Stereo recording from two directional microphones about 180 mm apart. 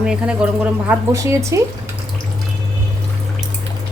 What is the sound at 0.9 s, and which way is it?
Speech, 15° right (ahead or behind).